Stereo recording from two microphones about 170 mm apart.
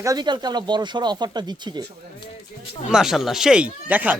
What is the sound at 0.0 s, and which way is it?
Speech, 25° right (ahead or behind).